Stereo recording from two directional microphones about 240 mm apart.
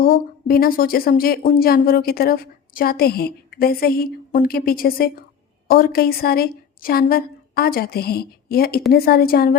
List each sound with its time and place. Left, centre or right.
0.0 s speech: left